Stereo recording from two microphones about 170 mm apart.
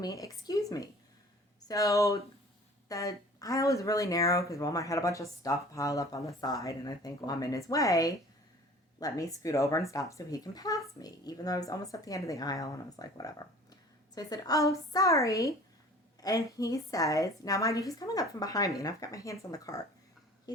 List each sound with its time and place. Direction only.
0.0 s speech: 20° left (ahead or behind)